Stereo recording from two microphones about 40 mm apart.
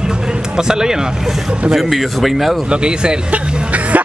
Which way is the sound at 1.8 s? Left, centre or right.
Centre.